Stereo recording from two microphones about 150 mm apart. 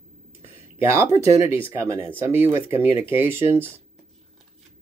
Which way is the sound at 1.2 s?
20° right (ahead or behind).